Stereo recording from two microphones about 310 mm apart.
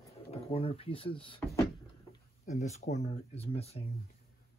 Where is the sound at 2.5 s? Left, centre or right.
Left.